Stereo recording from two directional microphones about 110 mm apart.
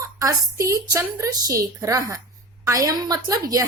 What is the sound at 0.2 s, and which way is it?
A woman's voice, 30° right (ahead or behind).